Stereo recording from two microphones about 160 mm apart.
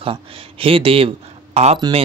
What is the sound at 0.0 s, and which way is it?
Speech, 35° right (ahead or behind).